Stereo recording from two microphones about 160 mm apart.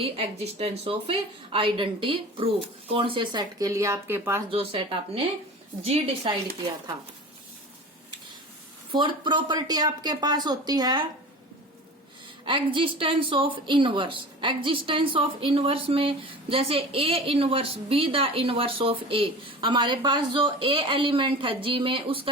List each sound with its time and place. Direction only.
0.0 s speech: 35° right (ahead or behind); by 4.4 s 15° right (ahead or behind)
4.5 s speech: 35° right (ahead or behind)
8.9 s speech: 30° right (ahead or behind)
12.5 s speech: 30° right (ahead or behind)